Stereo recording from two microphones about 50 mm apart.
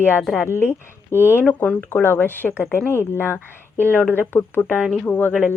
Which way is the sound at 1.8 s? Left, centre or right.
Left.